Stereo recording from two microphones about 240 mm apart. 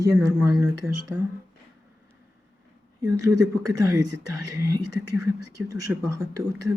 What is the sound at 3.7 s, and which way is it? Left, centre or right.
Speech, right.